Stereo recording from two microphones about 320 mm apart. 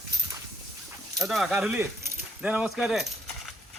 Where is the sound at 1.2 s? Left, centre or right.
Centre.